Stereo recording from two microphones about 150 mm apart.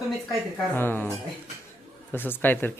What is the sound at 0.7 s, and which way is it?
Speech, 15° left (ahead or behind).